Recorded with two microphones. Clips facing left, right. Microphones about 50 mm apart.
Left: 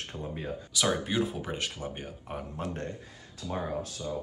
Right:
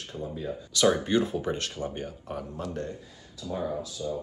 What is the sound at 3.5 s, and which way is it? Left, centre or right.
Speech, left.